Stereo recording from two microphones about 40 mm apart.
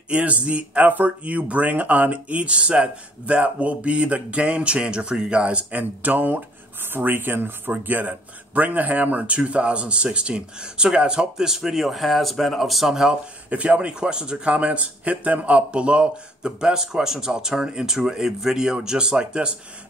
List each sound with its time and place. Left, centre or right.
0.1 s speech: right
5.7 s speech: right
7.8 s speech: right; by 13.1 s centre
13.1 s speech: right
16.5 s speech: centre